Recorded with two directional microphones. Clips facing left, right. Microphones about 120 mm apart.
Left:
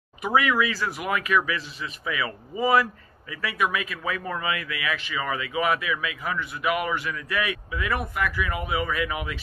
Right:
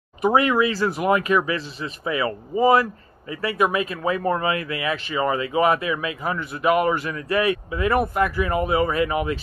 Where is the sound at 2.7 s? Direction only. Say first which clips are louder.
Right 3 dB; 30° right (ahead or behind).